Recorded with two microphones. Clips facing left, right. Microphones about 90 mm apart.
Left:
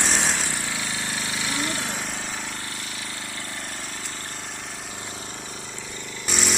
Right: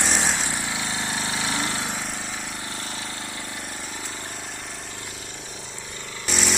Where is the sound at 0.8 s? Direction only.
25° right (ahead or behind).